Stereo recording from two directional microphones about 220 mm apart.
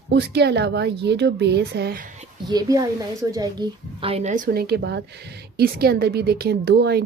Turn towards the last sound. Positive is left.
turn(degrees=-50)  # may be behind; listen again after turning